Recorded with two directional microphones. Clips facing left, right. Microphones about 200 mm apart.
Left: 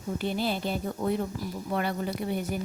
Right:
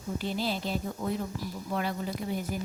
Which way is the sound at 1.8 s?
60° left (ahead or behind).